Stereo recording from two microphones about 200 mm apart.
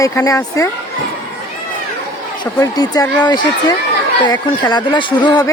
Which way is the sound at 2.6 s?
15° left (ahead or behind).